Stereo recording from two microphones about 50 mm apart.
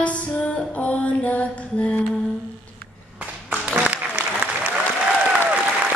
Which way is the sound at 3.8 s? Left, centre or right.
Right.